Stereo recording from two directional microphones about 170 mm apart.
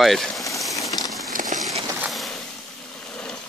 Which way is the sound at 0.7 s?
20° left (ahead or behind).